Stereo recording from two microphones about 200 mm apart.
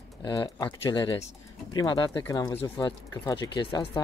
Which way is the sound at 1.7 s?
20° left (ahead or behind).